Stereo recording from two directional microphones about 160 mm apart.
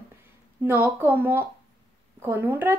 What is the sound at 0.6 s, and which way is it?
Speech, 10° right (ahead or behind).